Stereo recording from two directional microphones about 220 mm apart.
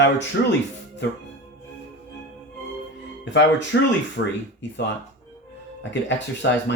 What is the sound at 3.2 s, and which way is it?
Speech, 55° left (ahead or behind).